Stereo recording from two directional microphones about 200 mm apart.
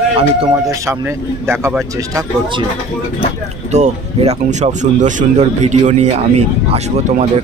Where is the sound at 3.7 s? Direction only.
35° right (ahead or behind).